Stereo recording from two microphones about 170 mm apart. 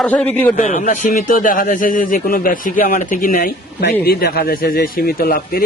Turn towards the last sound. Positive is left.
turn(degrees=60)  # may be behind; listen again after turning